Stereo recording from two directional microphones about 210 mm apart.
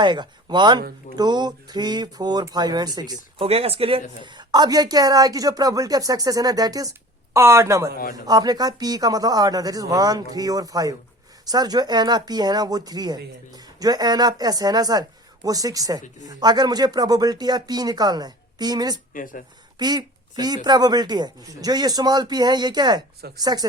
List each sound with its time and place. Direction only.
0.0 s speech: 20° right (ahead or behind)
19.1 s speech: 40° left (ahead or behind)
19.8 s speech: 20° right (ahead or behind)